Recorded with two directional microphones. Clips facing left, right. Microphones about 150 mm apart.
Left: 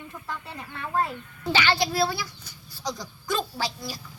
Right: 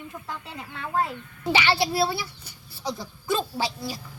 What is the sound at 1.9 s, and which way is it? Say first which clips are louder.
A man's voice: right 1 dB; 30° right (ahead or behind).